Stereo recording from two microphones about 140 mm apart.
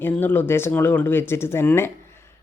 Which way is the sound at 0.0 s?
15° left (ahead or behind).